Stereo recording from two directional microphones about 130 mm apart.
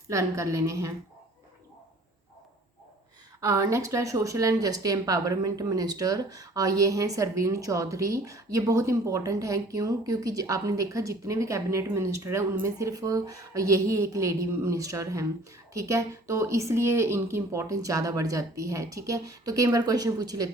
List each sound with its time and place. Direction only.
0.1 s speech: 25° right (ahead or behind)
3.4 s speech: 25° right (ahead or behind)